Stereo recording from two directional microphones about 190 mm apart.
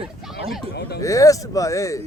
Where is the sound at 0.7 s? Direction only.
60° left (ahead or behind).